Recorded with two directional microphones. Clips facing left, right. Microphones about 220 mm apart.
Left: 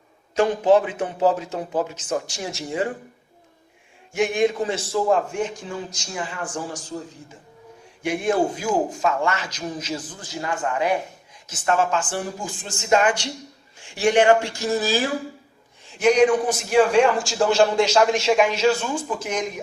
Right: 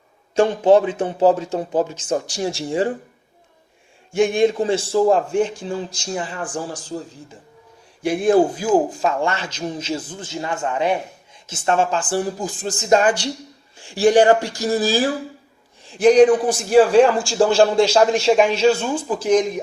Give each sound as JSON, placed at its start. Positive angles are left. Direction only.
{"t": 0.3, "sound": "a man's voice", "side_deg": -30}
{"t": 4.1, "sound": "a man's voice", "side_deg": -30}
{"t": 8.0, "sound": "a man's voice", "side_deg": -35}